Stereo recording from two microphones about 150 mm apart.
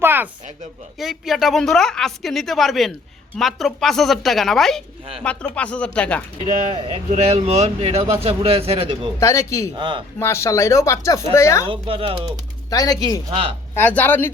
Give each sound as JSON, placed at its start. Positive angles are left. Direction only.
{"t": 0.0, "sound": "a sound", "side_deg": -15}
{"t": 0.9, "sound": "a woman's voice", "side_deg": 0}
{"t": 7.1, "sound": "a man's voice", "side_deg": -50}
{"t": 9.2, "sound": "speech", "side_deg": 20}
{"t": 9.7, "sound": "a man's voice", "side_deg": -30}
{"t": 10.2, "sound": "speech", "side_deg": 20}
{"t": 11.7, "sound": "a man's voice", "side_deg": -35}
{"t": 12.7, "sound": "speech", "side_deg": 25}
{"t": 13.7, "sound": "speech", "side_deg": 10}